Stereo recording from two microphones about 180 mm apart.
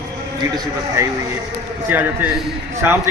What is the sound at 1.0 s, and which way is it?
A man's voice, 15° right (ahead or behind).